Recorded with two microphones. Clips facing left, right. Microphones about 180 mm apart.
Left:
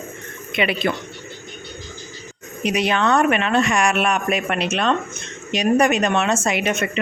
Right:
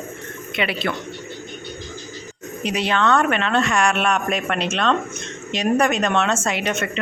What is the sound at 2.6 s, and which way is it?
Speech, 15° left (ahead or behind).